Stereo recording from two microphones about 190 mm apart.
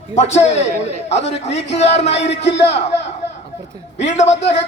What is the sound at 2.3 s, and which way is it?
Speech, 65° left (ahead or behind).